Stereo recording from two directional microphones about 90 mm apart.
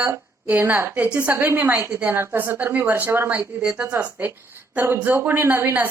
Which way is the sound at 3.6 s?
10° right (ahead or behind).